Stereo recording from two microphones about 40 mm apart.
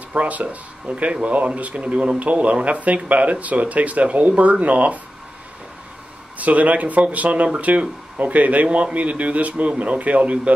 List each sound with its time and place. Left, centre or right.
0.1 s speech: right
6.3 s speech: right